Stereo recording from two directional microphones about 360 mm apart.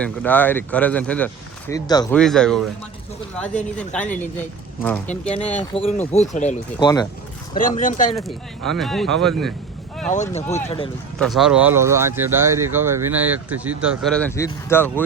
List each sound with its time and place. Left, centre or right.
0.0 s speech: centre
3.8 s speech: centre
5.5 s speech: centre
8.1 s speech: centre
10.1 s speech: centre
11.2 s speech: centre